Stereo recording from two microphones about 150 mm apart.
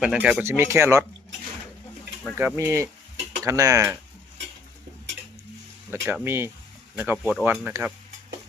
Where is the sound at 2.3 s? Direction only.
15° right (ahead or behind).